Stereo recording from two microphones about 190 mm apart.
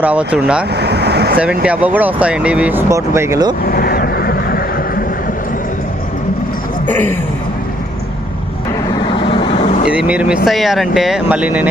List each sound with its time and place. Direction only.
0.0 s speech: 5° right (ahead or behind)
0.7 s vehicle: 60° right (ahead or behind)
1.4 s speech: 5° right (ahead or behind)
3.6 s vehicle: 50° left (ahead or behind)
6.8 s a sound: 10° left (ahead or behind)
9.3 s vehicle: 30° left (ahead or behind)
9.8 s speech: 5° right (ahead or behind)